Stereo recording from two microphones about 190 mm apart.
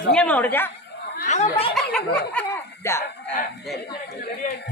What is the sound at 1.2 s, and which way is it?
Speech, 35° left (ahead or behind).